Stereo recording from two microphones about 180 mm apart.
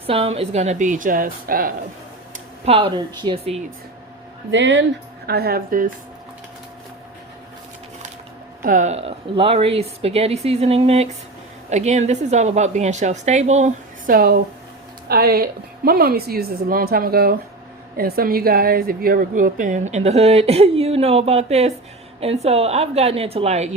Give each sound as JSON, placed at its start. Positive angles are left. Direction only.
{"t": 0.1, "sound": "a woman's voice", "side_deg": -35}
{"t": 2.6, "sound": "a woman's voice", "side_deg": -30}
{"t": 4.5, "sound": "a woman's voice", "side_deg": -90}
{"t": 8.6, "sound": "a woman's voice", "side_deg": -45}
{"t": 14.1, "sound": "a woman's voice", "side_deg": -55}